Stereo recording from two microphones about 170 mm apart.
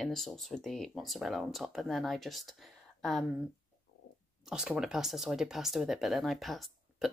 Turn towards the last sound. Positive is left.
turn(degrees=0)  # may be behind; listen again after turning